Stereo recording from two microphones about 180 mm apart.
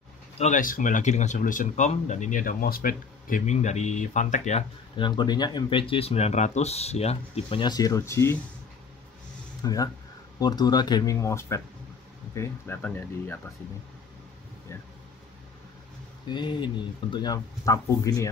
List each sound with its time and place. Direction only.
0.4 s speech: 45° left (ahead or behind)
4.9 s speech: 25° left (ahead or behind)
9.6 s speech: 20° left (ahead or behind)
16.3 s speech: 25° left (ahead or behind)